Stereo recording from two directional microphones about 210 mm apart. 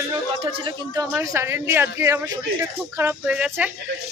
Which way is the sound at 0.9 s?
15° right (ahead or behind).